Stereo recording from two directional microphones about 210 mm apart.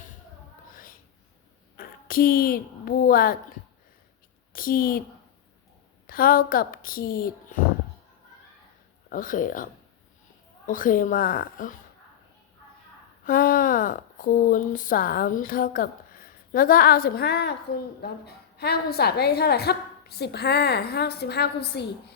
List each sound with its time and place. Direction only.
1.7 s a woman's voice: 45° left (ahead or behind)
4.5 s a woman's voice: 45° left (ahead or behind)
6.1 s a woman's voice: 45° left (ahead or behind)
9.0 s speech: 40° left (ahead or behind)
10.7 s speech: 40° left (ahead or behind)
13.2 s a woman's voice: 40° left (ahead or behind)